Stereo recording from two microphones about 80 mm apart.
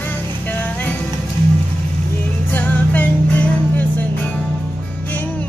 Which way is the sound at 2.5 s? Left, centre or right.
Left.